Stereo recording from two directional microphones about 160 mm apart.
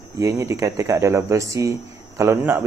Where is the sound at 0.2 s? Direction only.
20° right (ahead or behind).